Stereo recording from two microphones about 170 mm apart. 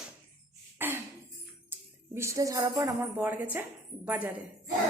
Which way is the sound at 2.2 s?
20° right (ahead or behind).